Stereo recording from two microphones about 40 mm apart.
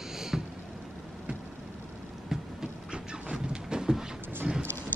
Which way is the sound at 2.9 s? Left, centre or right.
Right.